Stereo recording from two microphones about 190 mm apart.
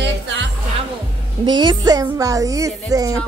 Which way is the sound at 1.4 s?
25° right (ahead or behind).